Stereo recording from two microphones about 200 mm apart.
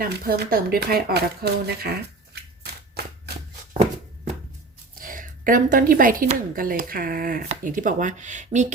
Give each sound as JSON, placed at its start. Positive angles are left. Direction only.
{"t": 0.0, "sound": "speech", "side_deg": -45}
{"t": 3.0, "sound": "a sound", "side_deg": -55}
{"t": 4.9, "sound": "a woman's voice", "side_deg": -45}